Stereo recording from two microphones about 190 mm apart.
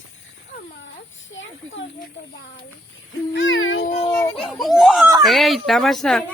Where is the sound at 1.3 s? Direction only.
85° left.